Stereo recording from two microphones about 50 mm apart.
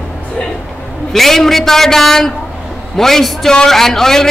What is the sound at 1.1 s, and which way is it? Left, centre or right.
A woman's voice, centre.